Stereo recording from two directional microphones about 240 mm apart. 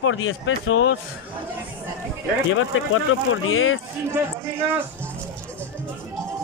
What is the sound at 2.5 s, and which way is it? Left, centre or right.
Speech, left.